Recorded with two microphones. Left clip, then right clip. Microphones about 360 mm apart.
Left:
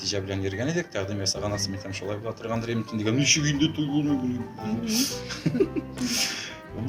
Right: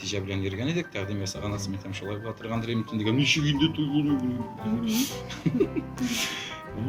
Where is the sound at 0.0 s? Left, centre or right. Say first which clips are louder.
Left 2 dB; centre.